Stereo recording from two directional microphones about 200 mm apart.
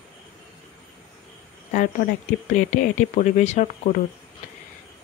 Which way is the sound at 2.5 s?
40° left (ahead or behind).